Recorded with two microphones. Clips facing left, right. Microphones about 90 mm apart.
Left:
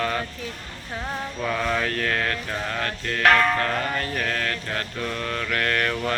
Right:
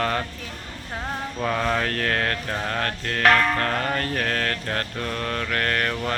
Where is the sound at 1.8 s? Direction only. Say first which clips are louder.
Right 1 dB; 50° right (ahead or behind).